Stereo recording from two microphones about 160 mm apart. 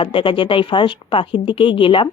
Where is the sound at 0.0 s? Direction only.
30° left (ahead or behind).